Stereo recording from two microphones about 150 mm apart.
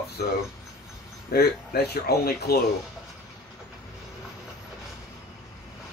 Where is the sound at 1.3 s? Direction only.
90° left.